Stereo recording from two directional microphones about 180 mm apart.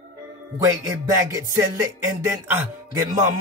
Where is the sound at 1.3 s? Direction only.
15° right (ahead or behind).